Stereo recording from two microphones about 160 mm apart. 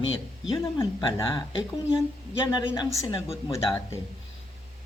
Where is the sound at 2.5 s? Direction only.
30° left (ahead or behind).